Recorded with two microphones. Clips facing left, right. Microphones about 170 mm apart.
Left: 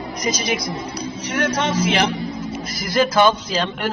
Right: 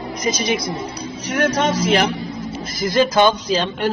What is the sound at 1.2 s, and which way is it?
Speech, 40° right (ahead or behind).